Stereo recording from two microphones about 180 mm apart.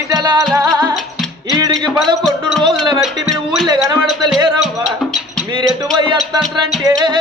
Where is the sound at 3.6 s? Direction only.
20° right (ahead or behind).